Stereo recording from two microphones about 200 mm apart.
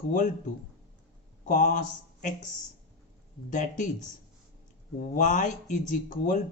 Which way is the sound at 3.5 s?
40° left (ahead or behind).